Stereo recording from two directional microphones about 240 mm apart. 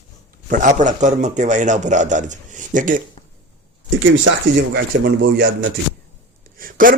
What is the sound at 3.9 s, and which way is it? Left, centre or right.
Speech, right.